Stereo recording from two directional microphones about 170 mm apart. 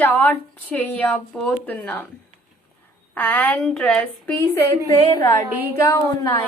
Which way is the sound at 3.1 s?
10° left (ahead or behind).